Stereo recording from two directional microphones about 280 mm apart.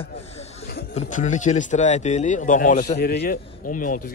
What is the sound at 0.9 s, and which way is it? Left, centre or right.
Speech, left.